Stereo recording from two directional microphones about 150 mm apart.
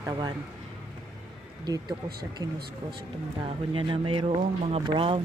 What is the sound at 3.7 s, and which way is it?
Speech, 35° right (ahead or behind).